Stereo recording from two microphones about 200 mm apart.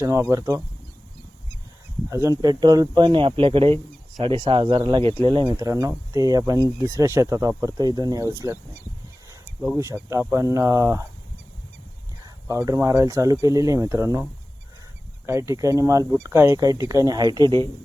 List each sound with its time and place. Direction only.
0.0 s speech: 15° right (ahead or behind)
2.0 s speech: 15° right (ahead or behind)
12.2 s speech: 15° right (ahead or behind)
15.3 s speech: 15° right (ahead or behind)